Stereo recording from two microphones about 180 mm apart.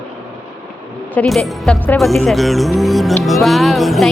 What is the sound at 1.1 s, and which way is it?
Speech, 5° left (ahead or behind).